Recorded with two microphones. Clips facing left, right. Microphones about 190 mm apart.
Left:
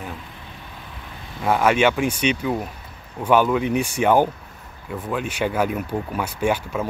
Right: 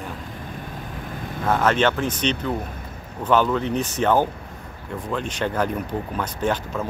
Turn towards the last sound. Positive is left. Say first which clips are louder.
# left 2 dB
turn(degrees=10)  # may be behind; listen again after turning